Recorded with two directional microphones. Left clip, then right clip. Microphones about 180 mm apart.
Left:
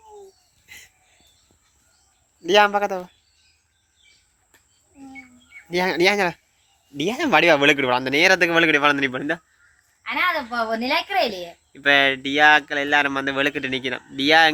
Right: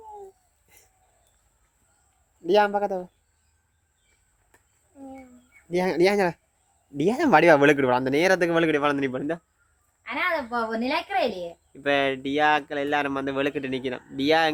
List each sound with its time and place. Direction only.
0.7 s a sound: 5° right (ahead or behind)
2.5 s speech: centre (ahead or behind)
5.7 s speech: 10° right (ahead or behind)
10.0 s a woman's voice: 30° left (ahead or behind)
11.7 s speech: centre (ahead or behind)